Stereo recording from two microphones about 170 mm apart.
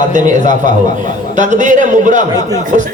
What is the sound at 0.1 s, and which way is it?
A man's voice, 45° right (ahead or behind).